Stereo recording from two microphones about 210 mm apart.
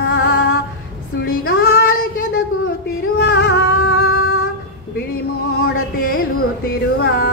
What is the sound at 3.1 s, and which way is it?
Music, 50° left (ahead or behind).